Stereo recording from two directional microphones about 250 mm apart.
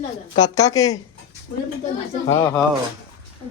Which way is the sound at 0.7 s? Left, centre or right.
Centre.